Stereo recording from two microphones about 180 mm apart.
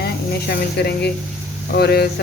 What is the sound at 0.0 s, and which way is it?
Speech, 60° left (ahead or behind).